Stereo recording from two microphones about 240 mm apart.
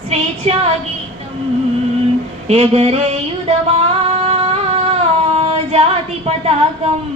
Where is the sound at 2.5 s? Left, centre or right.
Right.